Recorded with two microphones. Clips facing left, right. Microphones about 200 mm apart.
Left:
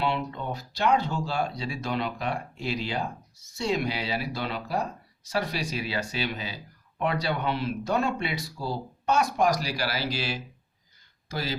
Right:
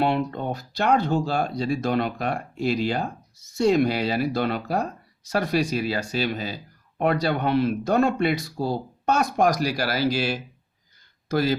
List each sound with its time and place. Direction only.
0.0 s speech: 50° right (ahead or behind)